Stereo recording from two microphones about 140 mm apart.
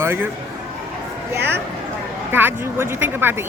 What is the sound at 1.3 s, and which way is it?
Speech, 15° right (ahead or behind).